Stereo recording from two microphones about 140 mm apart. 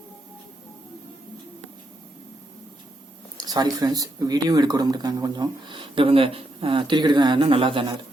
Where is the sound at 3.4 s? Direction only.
30° right (ahead or behind).